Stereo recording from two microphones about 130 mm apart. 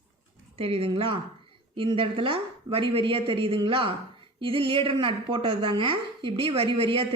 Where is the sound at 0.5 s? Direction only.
45° right (ahead or behind).